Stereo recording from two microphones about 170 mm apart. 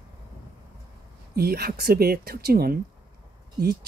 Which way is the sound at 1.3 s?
65° right (ahead or behind).